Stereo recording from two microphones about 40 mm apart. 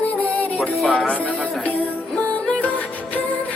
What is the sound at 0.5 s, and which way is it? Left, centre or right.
Music, centre.